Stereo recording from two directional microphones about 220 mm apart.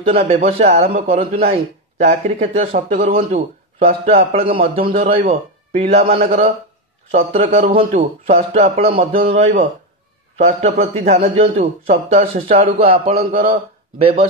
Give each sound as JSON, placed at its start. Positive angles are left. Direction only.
{"t": 0.0, "sound": "speech", "side_deg": -25}
{"t": 8.9, "sound": "speech", "side_deg": -40}
{"t": 13.1, "sound": "a man's voice", "side_deg": -45}
{"t": 13.4, "sound": "a man's voice", "side_deg": -25}